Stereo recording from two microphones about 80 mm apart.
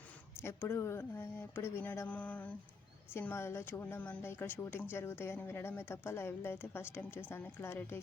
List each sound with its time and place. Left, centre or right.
0.4 s speech: left
2.0 s a sound: centre
3.1 s speech: left